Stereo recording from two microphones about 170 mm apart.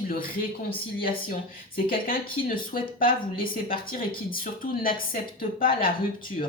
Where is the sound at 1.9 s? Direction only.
60° left (ahead or behind).